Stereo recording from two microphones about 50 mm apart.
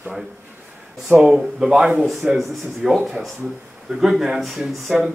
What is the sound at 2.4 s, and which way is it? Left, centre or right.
Speech, centre.